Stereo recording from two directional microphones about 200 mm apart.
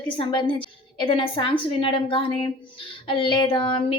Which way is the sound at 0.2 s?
25° left (ahead or behind).